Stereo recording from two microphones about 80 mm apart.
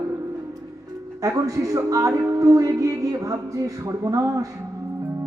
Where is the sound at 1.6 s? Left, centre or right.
Right.